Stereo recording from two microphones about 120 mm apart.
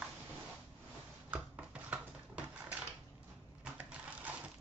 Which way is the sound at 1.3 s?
10° right (ahead or behind).